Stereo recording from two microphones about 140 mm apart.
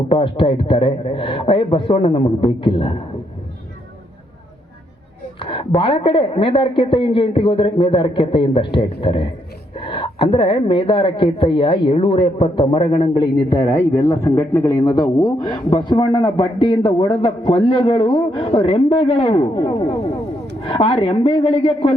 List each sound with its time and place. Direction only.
0.1 s a woman's voice: 40° left (ahead or behind)
5.4 s a woman's voice: 40° left (ahead or behind)
19.8 s a sound: 45° left (ahead or behind)
20.7 s a woman's voice: 40° left (ahead or behind)